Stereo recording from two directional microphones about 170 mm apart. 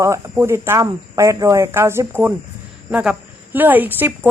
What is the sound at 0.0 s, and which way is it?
A woman's voice, 15° right (ahead or behind).